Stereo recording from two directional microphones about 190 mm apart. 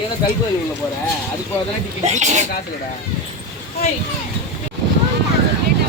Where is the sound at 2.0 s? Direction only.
40° right (ahead or behind).